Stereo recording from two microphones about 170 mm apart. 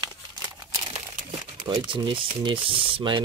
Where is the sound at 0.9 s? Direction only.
30° right (ahead or behind).